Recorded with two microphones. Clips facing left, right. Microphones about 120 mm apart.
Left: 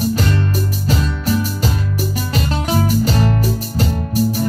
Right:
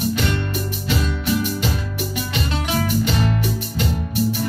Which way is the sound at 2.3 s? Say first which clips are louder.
Left 5 dB; 40° left (ahead or behind).